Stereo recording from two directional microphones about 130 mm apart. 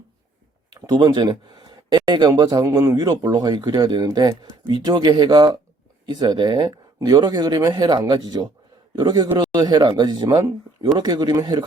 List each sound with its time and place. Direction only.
0.7 s speech: 30° right (ahead or behind)